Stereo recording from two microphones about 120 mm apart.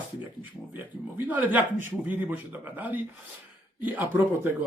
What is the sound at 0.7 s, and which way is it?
A man's voice, 15° right (ahead or behind).